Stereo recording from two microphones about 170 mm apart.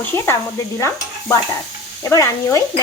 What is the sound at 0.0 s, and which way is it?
Speech, 15° left (ahead or behind).